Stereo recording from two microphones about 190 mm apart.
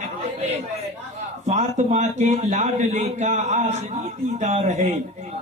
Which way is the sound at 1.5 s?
40° right (ahead or behind).